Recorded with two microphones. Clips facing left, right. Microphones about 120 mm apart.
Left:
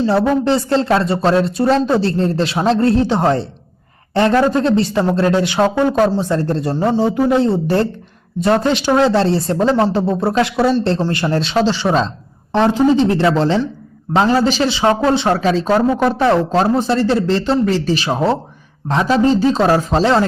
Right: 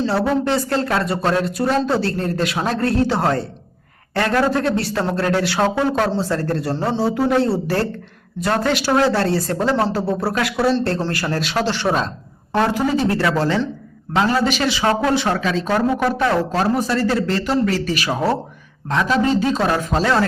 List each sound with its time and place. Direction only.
0.0 s a man's voice: 25° left (ahead or behind)
12.5 s a man's voice: 25° left (ahead or behind)